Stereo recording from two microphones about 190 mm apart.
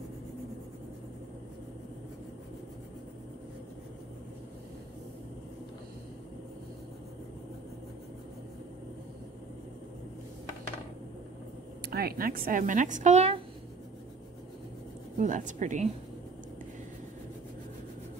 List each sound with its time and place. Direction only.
11.9 s a woman's voice: 55° right (ahead or behind); by 13.4 s 35° right (ahead or behind)
15.1 s speech: 40° right (ahead or behind)